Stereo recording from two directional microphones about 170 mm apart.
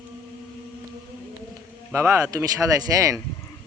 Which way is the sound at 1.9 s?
15° right (ahead or behind).